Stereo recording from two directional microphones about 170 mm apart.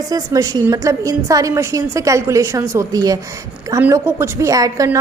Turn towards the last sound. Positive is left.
turn(degrees=-20)  # may be behind; listen again after turning